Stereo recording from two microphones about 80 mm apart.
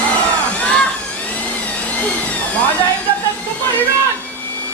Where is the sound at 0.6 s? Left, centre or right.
Centre.